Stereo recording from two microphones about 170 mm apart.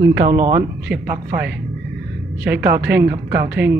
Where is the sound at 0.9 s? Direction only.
10° right (ahead or behind).